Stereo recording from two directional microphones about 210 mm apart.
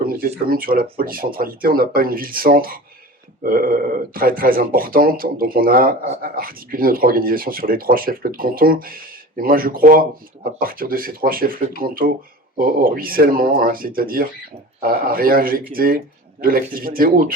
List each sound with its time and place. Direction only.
0.0 s speech: 45° right (ahead or behind)